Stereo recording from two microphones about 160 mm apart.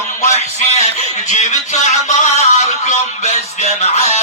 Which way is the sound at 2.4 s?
45° left (ahead or behind).